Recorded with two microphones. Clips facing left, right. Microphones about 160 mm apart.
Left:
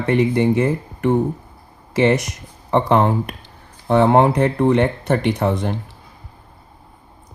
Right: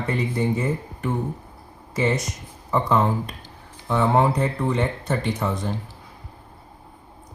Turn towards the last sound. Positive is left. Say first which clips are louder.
# left 6 dB
turn(degrees=65)  # may be behind; listen again after turning